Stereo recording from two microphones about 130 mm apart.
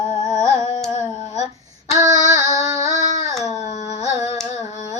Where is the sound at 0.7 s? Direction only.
60° left (ahead or behind).